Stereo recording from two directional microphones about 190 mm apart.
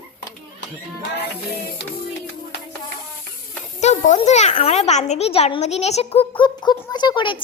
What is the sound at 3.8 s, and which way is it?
A child's voice, 35° left (ahead or behind).